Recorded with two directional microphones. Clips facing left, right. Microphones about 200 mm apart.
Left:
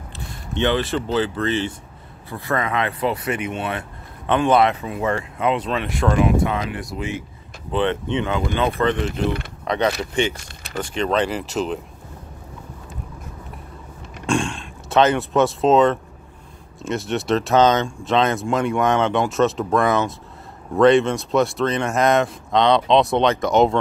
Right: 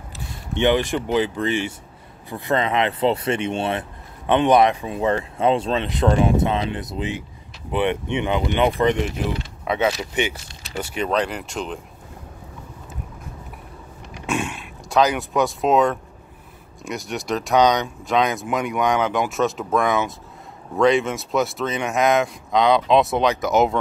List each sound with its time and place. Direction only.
0.6 s speech: 15° right (ahead or behind)
4.3 s speech: 15° right (ahead or behind)
9.7 s mechanisms: 5° right (ahead or behind)
10.3 s speech: 60° left (ahead or behind)
10.7 s speech: 10° right (ahead or behind)
14.1 s a sound: 5° right (ahead or behind)
16.8 s speech: centre (ahead or behind)
17.6 s speech: 15° right (ahead or behind)
17.8 s speech: centre (ahead or behind)